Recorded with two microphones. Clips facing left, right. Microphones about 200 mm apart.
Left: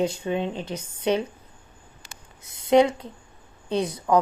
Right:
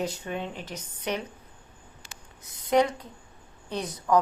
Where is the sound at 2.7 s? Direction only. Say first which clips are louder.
Left 5 dB; 25° left (ahead or behind).